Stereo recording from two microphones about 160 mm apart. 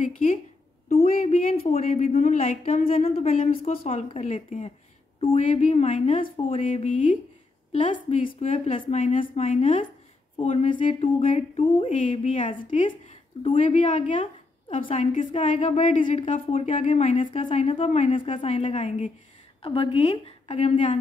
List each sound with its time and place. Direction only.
0.0 s speech: 55° left (ahead or behind)
0.8 s speech: 40° left (ahead or behind)
3.0 s a woman's voice: 35° left (ahead or behind)
6.6 s speech: 50° left (ahead or behind)
7.7 s a woman's voice: 40° left (ahead or behind)
9.0 s speech: 55° left (ahead or behind)
14.1 s a sound: 35° left (ahead or behind)
14.9 s speech: 45° left (ahead or behind)
18.1 s a woman's voice: 35° left (ahead or behind)